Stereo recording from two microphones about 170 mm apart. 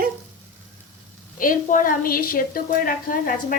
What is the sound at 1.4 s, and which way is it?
A woman's voice, 50° left (ahead or behind).